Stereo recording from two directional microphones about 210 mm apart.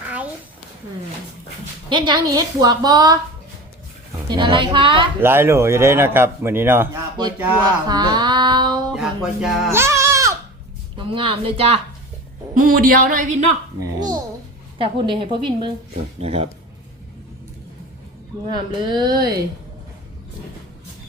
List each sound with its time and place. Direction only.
0.0 s a sound: 5° right (ahead or behind)
1.9 s a woman's voice: 20° right (ahead or behind)
4.3 s a woman's voice: 20° right (ahead or behind)
5.2 s a man's voice: 10° right (ahead or behind)
8.9 s speech: centre (ahead or behind)
9.7 s music: 15° right (ahead or behind)
10.9 s a woman's voice: 25° right (ahead or behind)
12.5 s a woman's voice: 40° right (ahead or behind)
13.7 s a man's voice: 15° right (ahead or behind)
18.4 s a woman's voice: 20° right (ahead or behind)